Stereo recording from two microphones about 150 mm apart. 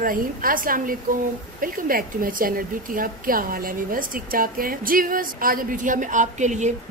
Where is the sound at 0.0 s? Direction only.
70° right (ahead or behind).